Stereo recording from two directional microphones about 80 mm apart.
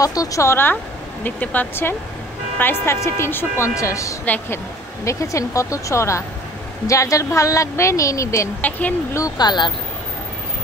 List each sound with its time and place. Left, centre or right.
0.0 s speech: left
8.5 s speech: centre
9.4 s speech: left